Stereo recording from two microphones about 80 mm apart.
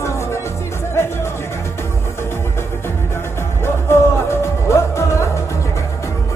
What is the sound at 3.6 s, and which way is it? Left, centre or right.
Music, left.